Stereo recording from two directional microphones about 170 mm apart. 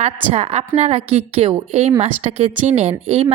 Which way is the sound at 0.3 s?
35° right (ahead or behind).